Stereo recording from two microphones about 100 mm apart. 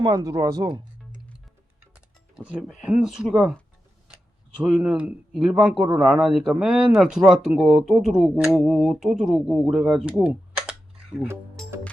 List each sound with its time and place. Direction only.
0.0 s speech: 40° right (ahead or behind)
2.8 s speech: 5° right (ahead or behind)
4.8 s speech: 10° right (ahead or behind)
11.6 s music: 5° left (ahead or behind)